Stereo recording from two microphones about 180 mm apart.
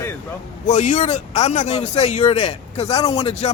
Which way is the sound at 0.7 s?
45° left (ahead or behind).